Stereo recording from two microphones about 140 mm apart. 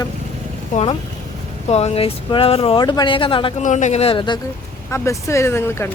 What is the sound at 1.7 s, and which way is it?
Speech, 45° left (ahead or behind).